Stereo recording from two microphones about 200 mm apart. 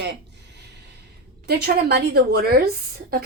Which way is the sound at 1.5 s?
50° right (ahead or behind).